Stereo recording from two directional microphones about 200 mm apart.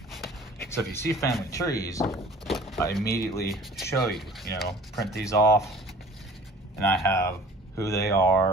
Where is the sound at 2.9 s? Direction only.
50° left (ahead or behind).